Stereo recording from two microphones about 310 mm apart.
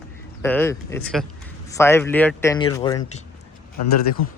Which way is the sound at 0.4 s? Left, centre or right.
Centre.